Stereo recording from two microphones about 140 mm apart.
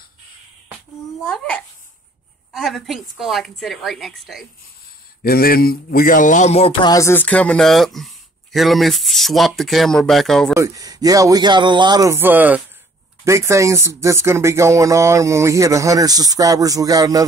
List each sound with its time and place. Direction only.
1.2 s speech: 5° left (ahead or behind)
5.2 s speech: 90° left; by 6.7 s 50° left (ahead or behind)
6.8 s speech: 25° left (ahead or behind); by 10.5 s centre (ahead or behind)
10.5 s speech: 20° right (ahead or behind)